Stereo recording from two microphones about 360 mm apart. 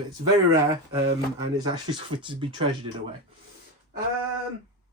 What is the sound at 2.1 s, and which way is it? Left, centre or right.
Speech, centre.